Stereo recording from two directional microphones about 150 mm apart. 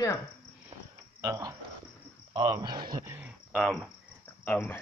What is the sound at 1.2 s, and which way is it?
Speech, 20° right (ahead or behind).